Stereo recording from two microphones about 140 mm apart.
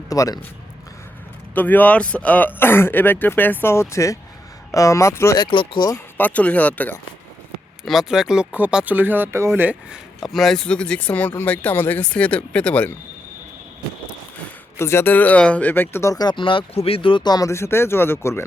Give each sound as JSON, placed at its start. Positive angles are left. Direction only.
{"t": 0.1, "sound": "speech", "side_deg": 25}
{"t": 1.5, "sound": "speech", "side_deg": 10}
{"t": 5.4, "sound": "speech", "side_deg": 35}
{"t": 6.1, "sound": "speech", "side_deg": 10}
{"t": 7.9, "sound": "speech", "side_deg": -5}
{"t": 10.2, "sound": "speech", "side_deg": 0}
{"t": 14.8, "sound": "speech", "side_deg": 20}